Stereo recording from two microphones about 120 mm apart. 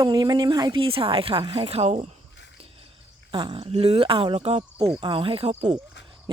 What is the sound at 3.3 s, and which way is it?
Speech, 45° right (ahead or behind).